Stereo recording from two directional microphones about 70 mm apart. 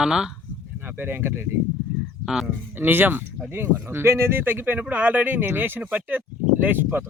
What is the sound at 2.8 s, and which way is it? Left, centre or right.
Speech, right.